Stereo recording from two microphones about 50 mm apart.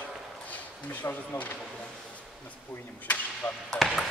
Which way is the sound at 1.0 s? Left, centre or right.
Left.